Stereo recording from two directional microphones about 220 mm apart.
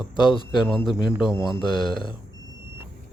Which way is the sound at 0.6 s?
Centre (ahead or behind).